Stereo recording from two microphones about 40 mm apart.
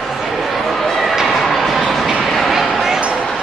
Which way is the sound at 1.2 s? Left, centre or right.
Centre.